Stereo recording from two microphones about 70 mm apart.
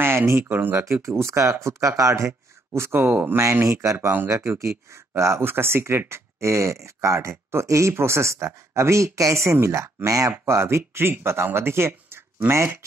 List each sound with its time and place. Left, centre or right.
0.0 s speech: right
3.6 s speech: right
10.4 s speech: right